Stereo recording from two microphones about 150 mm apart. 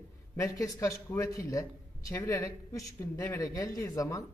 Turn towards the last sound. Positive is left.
turn(degrees=20)  # may be behind; listen again after turning